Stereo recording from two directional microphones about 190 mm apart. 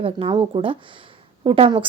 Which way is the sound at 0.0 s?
30° right (ahead or behind).